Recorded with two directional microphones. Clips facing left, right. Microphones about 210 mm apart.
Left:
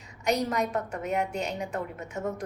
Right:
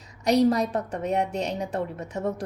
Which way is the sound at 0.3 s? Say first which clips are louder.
Right 7 dB; 35° right (ahead or behind).